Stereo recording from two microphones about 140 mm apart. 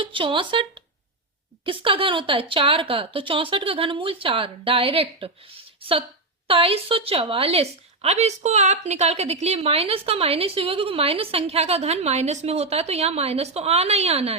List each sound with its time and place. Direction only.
0.0 s a woman's voice: 35° right (ahead or behind)